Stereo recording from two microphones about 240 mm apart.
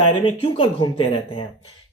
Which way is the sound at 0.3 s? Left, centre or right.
Left.